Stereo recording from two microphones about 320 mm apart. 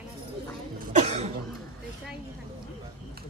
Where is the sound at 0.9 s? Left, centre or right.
Centre.